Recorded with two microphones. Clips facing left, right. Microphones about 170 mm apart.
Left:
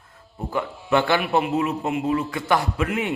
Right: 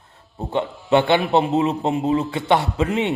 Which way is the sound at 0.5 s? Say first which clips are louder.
Right 4 dB; 20° right (ahead or behind).